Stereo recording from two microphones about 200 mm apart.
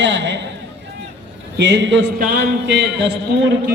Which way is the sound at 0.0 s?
65° right (ahead or behind).